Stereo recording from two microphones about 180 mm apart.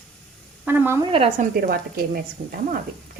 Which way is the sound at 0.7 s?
15° right (ahead or behind).